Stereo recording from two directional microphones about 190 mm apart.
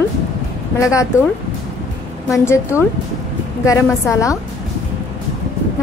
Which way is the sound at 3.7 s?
15° left (ahead or behind).